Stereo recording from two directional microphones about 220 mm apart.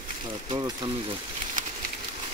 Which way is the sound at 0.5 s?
20° right (ahead or behind).